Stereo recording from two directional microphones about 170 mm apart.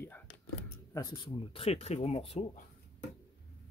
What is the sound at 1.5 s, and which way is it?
Speech, 35° left (ahead or behind).